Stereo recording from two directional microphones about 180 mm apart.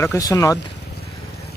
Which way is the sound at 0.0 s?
15° left (ahead or behind).